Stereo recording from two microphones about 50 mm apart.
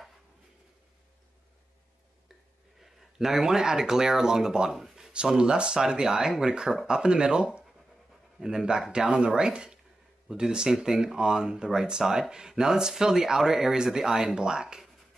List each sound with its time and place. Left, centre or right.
2.8 s speech: centre
5.1 s speech: centre